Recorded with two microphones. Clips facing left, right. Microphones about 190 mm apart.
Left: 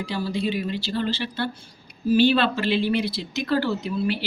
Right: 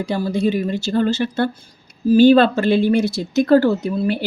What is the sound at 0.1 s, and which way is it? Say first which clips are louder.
Speech: right 7 dB; 45° right (ahead or behind).